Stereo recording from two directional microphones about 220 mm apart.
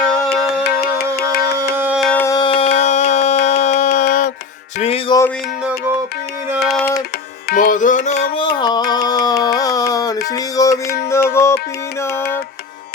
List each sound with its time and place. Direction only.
0.6 s music: 45° left (ahead or behind)
1.7 s music: 10° right (ahead or behind); by 2.6 s 20° left (ahead or behind)
2.7 s music: 30° left (ahead or behind)
6.5 s music: centre (ahead or behind)
7.5 s music: 35° left (ahead or behind); by 11.5 s 10° left (ahead or behind)